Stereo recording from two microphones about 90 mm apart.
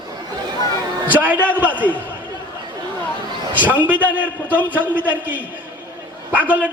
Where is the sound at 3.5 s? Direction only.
20° right (ahead or behind).